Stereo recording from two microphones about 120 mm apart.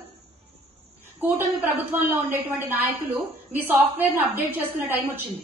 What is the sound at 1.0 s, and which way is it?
A woman's voice, 15° right (ahead or behind).